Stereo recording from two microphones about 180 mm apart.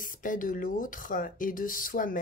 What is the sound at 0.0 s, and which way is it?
Speech, 45° left (ahead or behind).